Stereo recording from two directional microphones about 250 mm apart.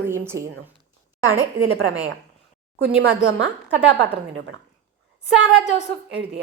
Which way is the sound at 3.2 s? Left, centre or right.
Right.